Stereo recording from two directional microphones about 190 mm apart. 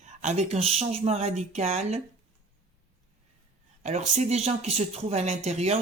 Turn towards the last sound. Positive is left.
turn(degrees=-35)  # may be behind; listen again after turning